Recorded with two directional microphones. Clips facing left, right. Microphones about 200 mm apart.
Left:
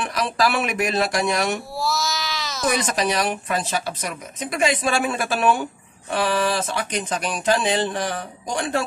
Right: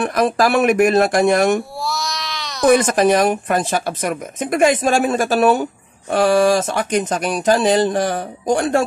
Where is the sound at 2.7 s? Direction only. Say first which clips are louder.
Right 10 dB; 50° right (ahead or behind).